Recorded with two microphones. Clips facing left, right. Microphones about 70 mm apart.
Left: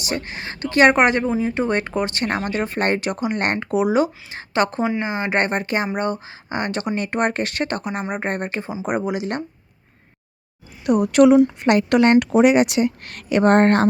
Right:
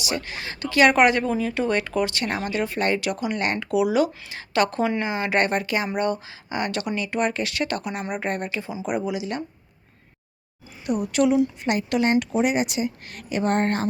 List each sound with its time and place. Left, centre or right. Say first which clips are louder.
0.0 s speech: left 2 dB; left
1.2 s speech: left 3 dB; left
7.0 s speech: left 3 dB; left
10.8 s speech: left 8 dB; left
11.7 s a woman's voice: left 7 dB; left